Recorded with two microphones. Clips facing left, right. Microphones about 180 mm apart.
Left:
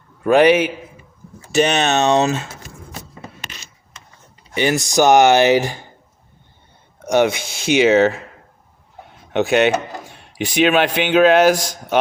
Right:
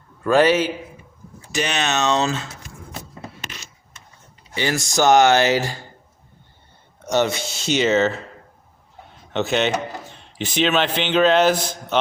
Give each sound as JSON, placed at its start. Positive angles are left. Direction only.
{"t": 0.2, "sound": "speech", "side_deg": 15}
{"t": 1.5, "sound": "speech", "side_deg": 55}
{"t": 2.1, "sound": "speech", "side_deg": 20}
{"t": 4.5, "sound": "speech", "side_deg": 20}
{"t": 7.0, "sound": "a sound", "side_deg": 15}
{"t": 7.4, "sound": "speech", "side_deg": 55}
{"t": 7.7, "sound": "speech", "side_deg": 15}
{"t": 9.3, "sound": "speech", "side_deg": 15}